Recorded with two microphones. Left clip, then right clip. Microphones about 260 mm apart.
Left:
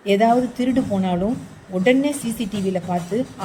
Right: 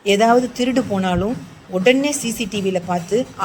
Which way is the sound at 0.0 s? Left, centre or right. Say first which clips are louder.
Right 3 dB; centre.